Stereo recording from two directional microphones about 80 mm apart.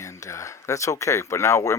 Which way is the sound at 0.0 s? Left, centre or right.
Left.